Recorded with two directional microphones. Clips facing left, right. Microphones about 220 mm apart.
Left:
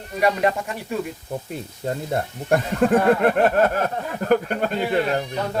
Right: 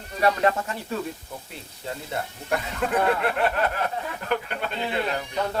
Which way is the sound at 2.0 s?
45° left (ahead or behind).